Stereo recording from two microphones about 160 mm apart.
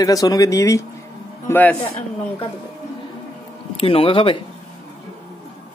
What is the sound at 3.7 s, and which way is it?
Speech, 35° left (ahead or behind).